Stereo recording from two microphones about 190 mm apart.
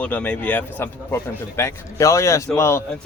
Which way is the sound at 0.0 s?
10° left (ahead or behind).